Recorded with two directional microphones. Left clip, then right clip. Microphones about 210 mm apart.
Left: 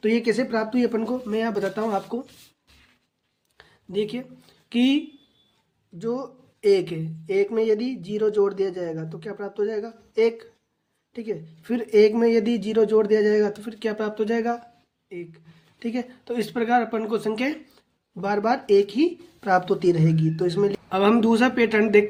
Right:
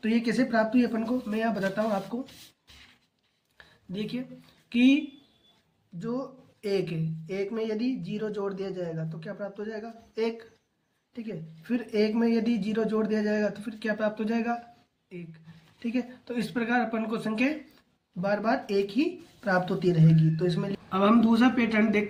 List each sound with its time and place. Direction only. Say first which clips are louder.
0.0 s speech: left 6 dB; 35° left (ahead or behind)
3.6 s a sound: left 11 dB; 40° left (ahead or behind)
4.7 s speech: left 1 dB; 40° left (ahead or behind)
6.0 s speech: left 6 dB; 40° left (ahead or behind)
15.8 s speech: left 3 dB; 40° left (ahead or behind)